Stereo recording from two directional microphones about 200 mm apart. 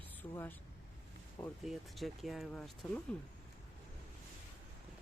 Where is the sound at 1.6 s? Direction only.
Centre (ahead or behind).